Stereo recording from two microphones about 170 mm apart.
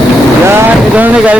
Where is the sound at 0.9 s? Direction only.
10° right (ahead or behind).